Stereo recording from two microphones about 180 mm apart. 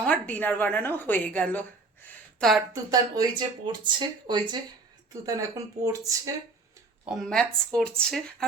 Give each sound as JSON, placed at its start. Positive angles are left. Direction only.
{"t": 0.0, "sound": "a woman's voice", "side_deg": 10}
{"t": 2.9, "sound": "speech", "side_deg": -20}
{"t": 7.0, "sound": "speech", "side_deg": 0}